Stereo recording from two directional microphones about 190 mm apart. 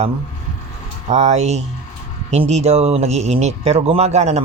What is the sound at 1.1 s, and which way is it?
Speech, 35° right (ahead or behind).